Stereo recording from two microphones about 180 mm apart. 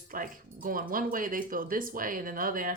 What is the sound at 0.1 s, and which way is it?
Speech, 50° right (ahead or behind).